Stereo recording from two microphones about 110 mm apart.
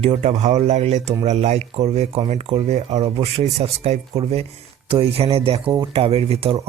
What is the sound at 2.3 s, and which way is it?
Speech, 60° right (ahead or behind).